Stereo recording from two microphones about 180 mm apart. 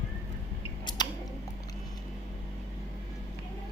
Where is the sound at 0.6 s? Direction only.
25° left (ahead or behind).